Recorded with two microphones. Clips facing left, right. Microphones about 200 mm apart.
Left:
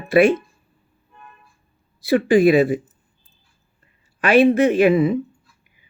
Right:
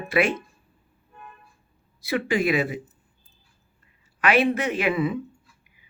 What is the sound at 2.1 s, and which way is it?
Speech, 30° left (ahead or behind).